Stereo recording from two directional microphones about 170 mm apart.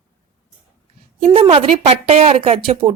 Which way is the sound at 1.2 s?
35° right (ahead or behind).